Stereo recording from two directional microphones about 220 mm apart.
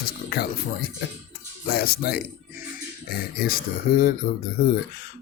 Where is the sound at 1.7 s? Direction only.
45° left (ahead or behind).